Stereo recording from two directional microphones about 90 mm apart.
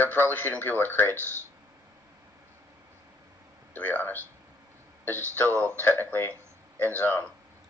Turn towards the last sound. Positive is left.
turn(degrees=20)  # may be behind; listen again after turning